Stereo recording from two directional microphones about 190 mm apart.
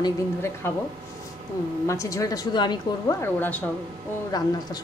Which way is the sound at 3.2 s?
10° left (ahead or behind).